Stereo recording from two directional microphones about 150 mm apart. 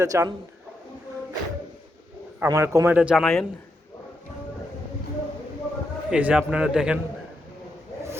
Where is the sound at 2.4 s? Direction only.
20° right (ahead or behind).